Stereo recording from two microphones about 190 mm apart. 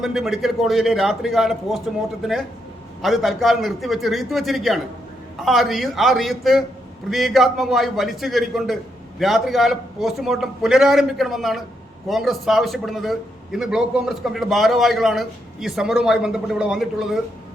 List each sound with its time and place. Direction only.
0.0 s a man's voice: centre (ahead or behind)
3.0 s a man's voice: centre (ahead or behind)